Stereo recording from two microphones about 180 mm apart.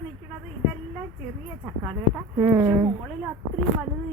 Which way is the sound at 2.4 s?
15° right (ahead or behind).